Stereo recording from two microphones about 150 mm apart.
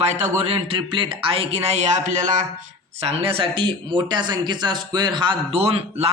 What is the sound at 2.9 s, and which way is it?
Speech, 40° right (ahead or behind).